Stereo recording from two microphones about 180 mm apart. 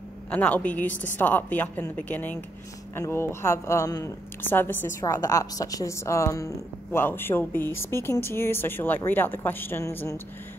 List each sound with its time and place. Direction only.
0.3 s a woman's voice: 5° left (ahead or behind)